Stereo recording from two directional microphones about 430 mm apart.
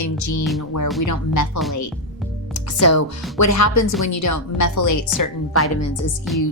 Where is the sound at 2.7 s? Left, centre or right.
Left.